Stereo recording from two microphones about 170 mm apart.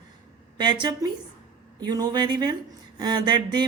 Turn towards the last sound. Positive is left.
turn(degrees=-25)  # may be behind; listen again after turning